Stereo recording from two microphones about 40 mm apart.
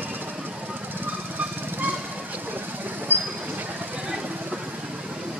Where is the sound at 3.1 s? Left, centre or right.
Right.